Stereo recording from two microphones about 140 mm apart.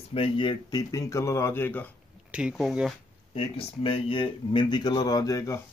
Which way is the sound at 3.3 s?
45° left (ahead or behind).